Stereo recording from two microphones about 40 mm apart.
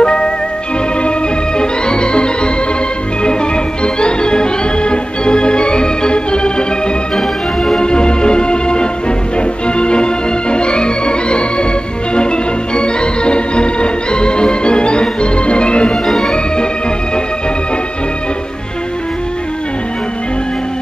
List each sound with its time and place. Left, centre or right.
0.0 s music: left
1.6 s organ: left
3.8 s organ: left
7.2 s music: centre
12.2 s organ: left
16.1 s organ: centre